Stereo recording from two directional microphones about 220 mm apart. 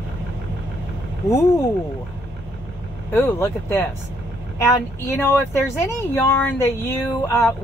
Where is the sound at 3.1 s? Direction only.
10° left (ahead or behind).